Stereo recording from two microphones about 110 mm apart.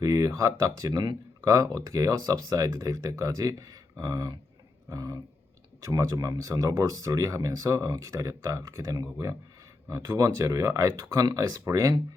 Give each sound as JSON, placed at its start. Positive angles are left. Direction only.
{"t": 0.0, "sound": "speech", "side_deg": -35}